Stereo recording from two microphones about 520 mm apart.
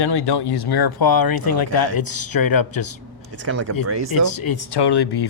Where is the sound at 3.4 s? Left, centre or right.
Right.